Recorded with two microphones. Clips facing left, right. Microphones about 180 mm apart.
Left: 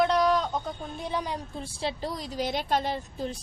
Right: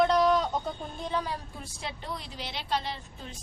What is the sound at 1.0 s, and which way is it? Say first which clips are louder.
Speech: left 1 dB; 15° left (ahead or behind).